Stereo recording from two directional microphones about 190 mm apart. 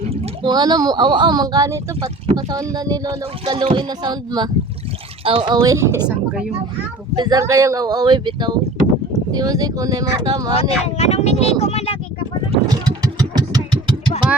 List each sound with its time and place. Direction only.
0.1 s speech: 25° right (ahead or behind)
5.6 s speech: 15° right (ahead or behind)
7.2 s speech: 20° right (ahead or behind)
10.6 s speech: 35° left (ahead or behind)
12.5 s vehicle: 20° right (ahead or behind)